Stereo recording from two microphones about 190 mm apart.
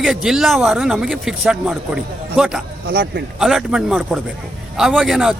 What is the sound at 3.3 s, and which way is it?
A man's voice, 5° right (ahead or behind).